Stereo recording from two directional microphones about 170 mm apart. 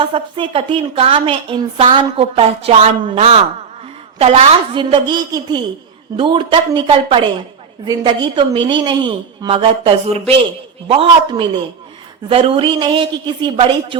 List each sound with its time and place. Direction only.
0.0 s a woman's voice: 30° right (ahead or behind)